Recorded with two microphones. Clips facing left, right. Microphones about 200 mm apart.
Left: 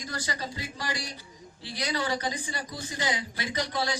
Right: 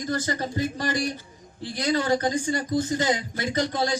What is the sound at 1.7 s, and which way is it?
A man's voice, 50° right (ahead or behind).